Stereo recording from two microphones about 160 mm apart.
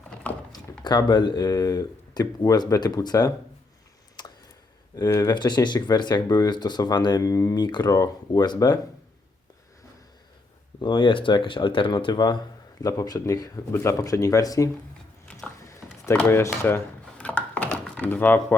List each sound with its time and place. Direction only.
0.1 s a sound: 10° left (ahead or behind)
0.9 s speech: 25° left (ahead or behind)
4.9 s speech: 25° left (ahead or behind)
10.8 s speech: 30° left (ahead or behind)
16.0 s mechanisms: 15° left (ahead or behind)